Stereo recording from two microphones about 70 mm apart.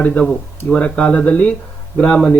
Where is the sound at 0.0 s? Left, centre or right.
Left.